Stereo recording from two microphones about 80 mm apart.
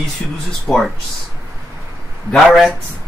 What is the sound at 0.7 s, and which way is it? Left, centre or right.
Speech, centre.